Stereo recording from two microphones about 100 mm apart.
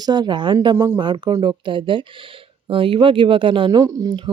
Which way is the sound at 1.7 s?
55° right (ahead or behind).